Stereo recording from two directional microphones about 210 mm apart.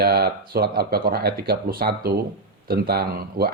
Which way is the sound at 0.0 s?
50° right (ahead or behind).